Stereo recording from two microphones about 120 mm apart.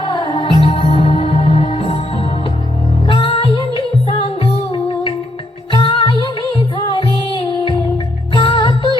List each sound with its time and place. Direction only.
0.0 s music: 40° left (ahead or behind)